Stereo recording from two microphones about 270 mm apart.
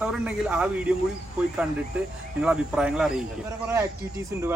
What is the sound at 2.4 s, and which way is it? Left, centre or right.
Speech, centre.